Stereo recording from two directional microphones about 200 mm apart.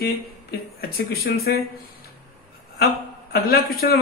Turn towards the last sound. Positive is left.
turn(degrees=50)  # may be behind; listen again after turning